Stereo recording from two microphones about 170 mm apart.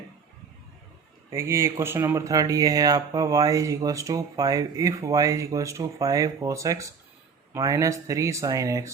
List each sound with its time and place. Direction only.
1.3 s speech: 15° right (ahead or behind)